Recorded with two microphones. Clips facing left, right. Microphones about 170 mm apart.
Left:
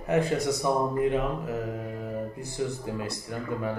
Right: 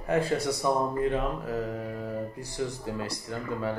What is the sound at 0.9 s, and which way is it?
Mantra, 15° left (ahead or behind).